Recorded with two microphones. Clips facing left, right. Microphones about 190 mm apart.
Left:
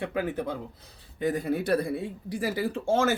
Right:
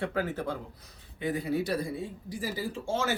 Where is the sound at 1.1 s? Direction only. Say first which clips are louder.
Left 3 dB; 45° left (ahead or behind).